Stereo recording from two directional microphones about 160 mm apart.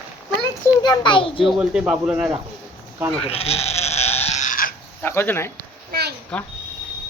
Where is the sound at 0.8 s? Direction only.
30° left (ahead or behind).